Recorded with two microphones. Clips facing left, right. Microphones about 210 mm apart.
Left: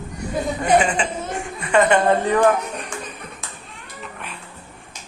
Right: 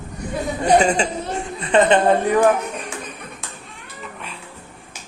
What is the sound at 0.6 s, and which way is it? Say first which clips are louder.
Speech: right 3 dB; 40° right (ahead or behind).